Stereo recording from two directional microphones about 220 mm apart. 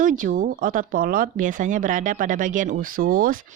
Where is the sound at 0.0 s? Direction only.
35° right (ahead or behind).